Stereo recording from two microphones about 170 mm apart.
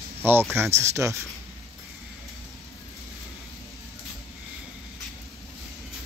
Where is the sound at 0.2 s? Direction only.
10° right (ahead or behind).